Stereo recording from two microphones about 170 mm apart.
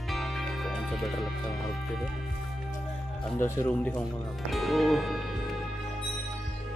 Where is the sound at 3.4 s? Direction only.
10° left (ahead or behind).